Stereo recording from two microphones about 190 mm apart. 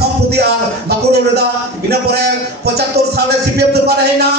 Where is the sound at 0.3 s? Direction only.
60° right (ahead or behind).